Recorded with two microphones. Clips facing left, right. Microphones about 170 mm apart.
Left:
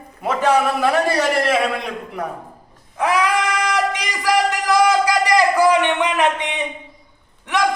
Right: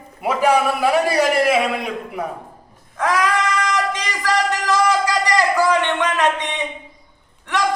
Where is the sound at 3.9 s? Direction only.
15° left (ahead or behind).